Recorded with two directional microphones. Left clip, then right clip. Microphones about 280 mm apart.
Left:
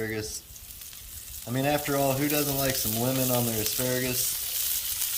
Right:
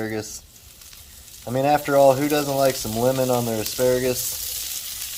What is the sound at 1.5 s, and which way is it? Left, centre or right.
Speech, centre.